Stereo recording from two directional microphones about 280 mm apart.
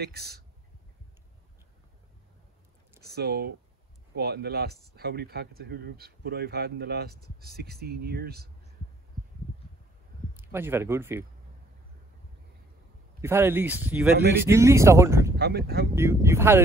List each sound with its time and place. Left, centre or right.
0.0 s speech: right
3.2 s speech: right
10.3 s speech: centre
13.2 s speech: centre
15.3 s speech: right
15.9 s speech: centre